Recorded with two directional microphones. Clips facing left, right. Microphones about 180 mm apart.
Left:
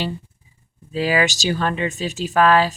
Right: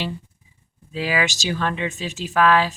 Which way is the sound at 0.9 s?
35° left (ahead or behind).